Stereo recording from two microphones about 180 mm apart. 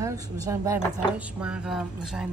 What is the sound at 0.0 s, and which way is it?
Speech, 20° right (ahead or behind).